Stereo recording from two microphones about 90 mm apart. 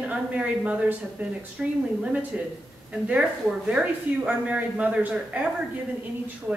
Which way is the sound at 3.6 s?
15° right (ahead or behind).